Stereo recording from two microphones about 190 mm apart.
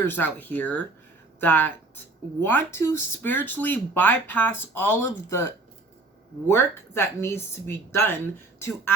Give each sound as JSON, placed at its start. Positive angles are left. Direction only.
{"t": 0.0, "sound": "speech", "side_deg": 10}
{"t": 6.5, "sound": "speech", "side_deg": 15}